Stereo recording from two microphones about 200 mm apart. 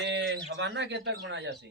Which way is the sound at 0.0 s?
60° right (ahead or behind).